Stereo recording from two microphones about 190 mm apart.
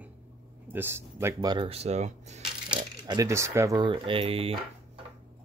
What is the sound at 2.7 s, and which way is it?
Speech, 20° right (ahead or behind).